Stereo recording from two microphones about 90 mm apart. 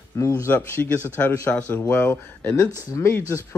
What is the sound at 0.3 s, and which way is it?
Speech, 25° left (ahead or behind).